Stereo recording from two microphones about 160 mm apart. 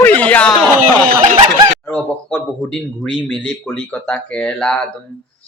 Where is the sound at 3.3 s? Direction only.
5° left (ahead or behind).